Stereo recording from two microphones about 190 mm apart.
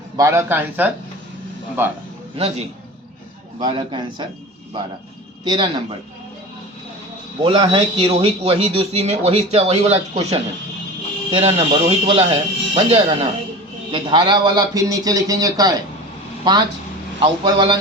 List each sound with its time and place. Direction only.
0.2 s a man's voice: 15° right (ahead or behind)
2.4 s speech: 30° right (ahead or behind)
3.6 s a man's voice: 25° right (ahead or behind)
5.5 s a man's voice: 25° right (ahead or behind)
7.4 s a man's voice: 25° right (ahead or behind)